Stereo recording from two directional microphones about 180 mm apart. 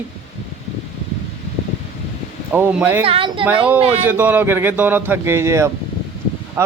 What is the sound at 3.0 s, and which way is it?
Speech, 30° right (ahead or behind).